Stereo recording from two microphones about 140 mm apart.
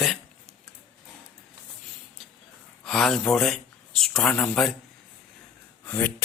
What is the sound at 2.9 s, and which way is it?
Speech, 5° left (ahead or behind).